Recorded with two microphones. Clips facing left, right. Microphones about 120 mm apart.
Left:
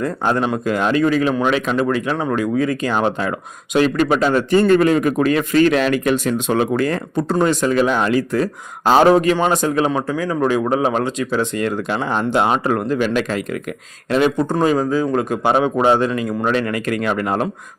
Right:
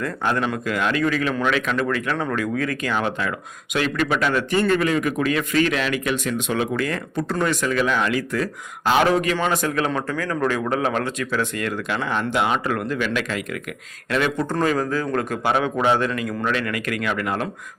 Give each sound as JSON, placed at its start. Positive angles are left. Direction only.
{"t": 0.0, "sound": "a man's voice", "side_deg": 30}
{"t": 2.9, "sound": "a man's voice", "side_deg": 35}